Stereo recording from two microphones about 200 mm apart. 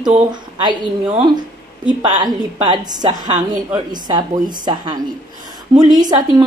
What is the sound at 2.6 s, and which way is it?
A woman's voice, 20° right (ahead or behind).